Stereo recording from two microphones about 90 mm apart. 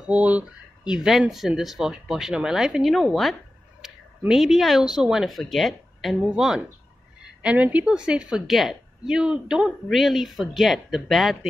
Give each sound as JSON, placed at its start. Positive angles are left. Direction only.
{"t": 0.0, "sound": "a woman's voice", "side_deg": -15}
{"t": 3.8, "sound": "a sound", "side_deg": -5}
{"t": 4.3, "sound": "a woman's voice", "side_deg": -5}
{"t": 7.4, "sound": "a woman's voice", "side_deg": -15}